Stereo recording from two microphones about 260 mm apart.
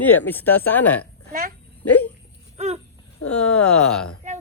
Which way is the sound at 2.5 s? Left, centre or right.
Right.